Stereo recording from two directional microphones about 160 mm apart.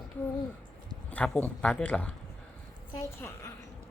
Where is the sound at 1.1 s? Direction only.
10° left (ahead or behind).